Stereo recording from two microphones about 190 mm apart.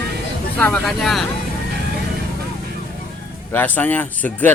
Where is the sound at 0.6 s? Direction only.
5° left (ahead or behind).